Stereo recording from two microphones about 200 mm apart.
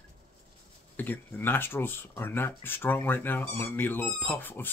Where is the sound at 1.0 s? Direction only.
10° left (ahead or behind).